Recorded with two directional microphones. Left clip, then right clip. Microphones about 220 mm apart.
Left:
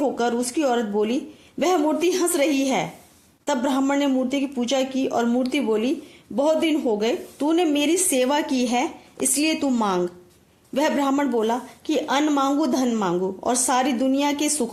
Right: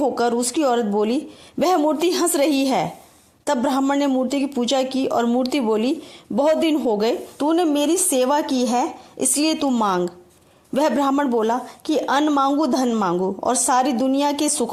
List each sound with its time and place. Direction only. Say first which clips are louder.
0.0 s speech: right 3 dB; 35° right (ahead or behind)